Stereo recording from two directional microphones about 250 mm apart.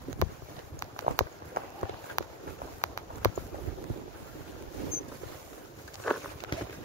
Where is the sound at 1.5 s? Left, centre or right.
Right.